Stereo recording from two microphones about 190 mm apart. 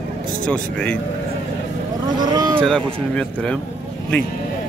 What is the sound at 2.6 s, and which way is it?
Speech, 5° left (ahead or behind).